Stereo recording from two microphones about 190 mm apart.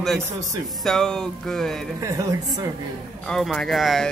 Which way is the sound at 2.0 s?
15° right (ahead or behind).